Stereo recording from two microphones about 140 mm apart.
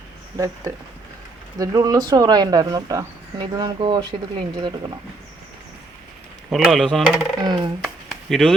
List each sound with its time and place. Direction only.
0.3 s speech: 20° right (ahead or behind)
6.5 s speech: centre (ahead or behind)
7.3 s speech: 30° right (ahead or behind)
8.1 s chop: centre (ahead or behind)